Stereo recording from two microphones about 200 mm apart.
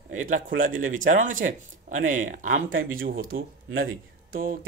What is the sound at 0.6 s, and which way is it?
Speech, 45° right (ahead or behind).